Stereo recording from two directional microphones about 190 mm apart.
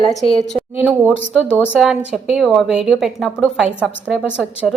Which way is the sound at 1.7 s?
5° right (ahead or behind).